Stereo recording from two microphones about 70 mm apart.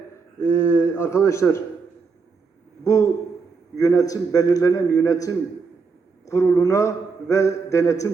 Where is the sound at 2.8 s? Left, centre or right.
Left.